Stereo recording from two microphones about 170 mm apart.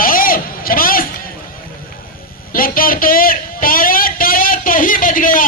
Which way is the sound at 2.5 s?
55° left (ahead or behind).